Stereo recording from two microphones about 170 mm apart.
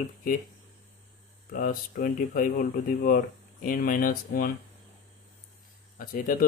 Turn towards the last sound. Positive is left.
turn(degrees=55)  # may be behind; listen again after turning